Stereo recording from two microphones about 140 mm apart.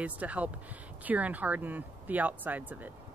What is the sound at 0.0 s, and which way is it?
Speech, 10° right (ahead or behind).